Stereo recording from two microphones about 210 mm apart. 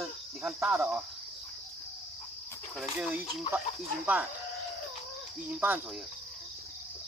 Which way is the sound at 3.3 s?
25° left (ahead or behind).